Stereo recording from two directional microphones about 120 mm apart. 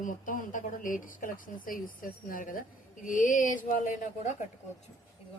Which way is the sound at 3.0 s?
90° left.